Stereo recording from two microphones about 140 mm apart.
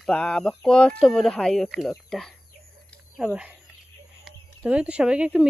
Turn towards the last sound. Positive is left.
turn(degrees=-5)  # may be behind; listen again after turning